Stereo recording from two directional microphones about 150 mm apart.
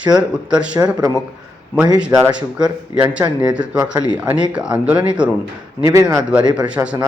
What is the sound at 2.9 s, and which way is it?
Speech, 10° right (ahead or behind).